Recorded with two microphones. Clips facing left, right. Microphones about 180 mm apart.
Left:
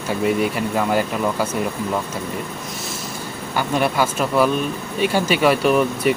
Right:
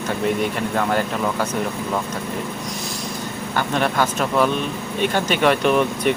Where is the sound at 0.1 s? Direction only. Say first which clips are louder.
Left 2 dB; 5° left (ahead or behind).